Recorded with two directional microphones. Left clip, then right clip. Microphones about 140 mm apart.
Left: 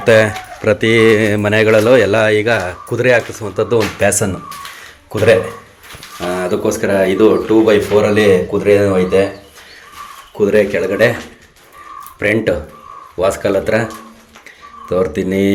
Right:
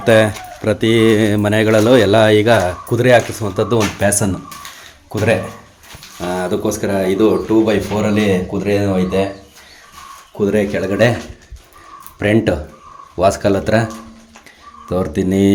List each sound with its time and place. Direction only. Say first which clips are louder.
0.0 s speech: left 2 dB; 20° right (ahead or behind)
10.3 s speech: left 4 dB; 20° right (ahead or behind)
10.8 s speech: left 2 dB; 35° right (ahead or behind)
12.2 s speech: left 1 dB; 45° right (ahead or behind)
14.8 s speech: left 3 dB; 25° right (ahead or behind)